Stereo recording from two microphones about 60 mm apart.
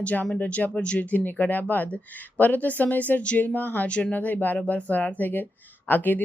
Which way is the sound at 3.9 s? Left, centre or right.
Centre.